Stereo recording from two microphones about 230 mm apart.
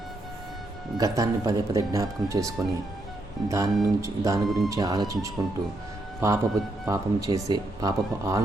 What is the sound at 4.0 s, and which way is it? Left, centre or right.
Speech, centre.